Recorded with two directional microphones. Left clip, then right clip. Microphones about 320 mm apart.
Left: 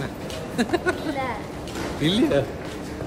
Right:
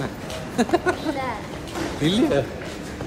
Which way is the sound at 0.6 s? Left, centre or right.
Centre.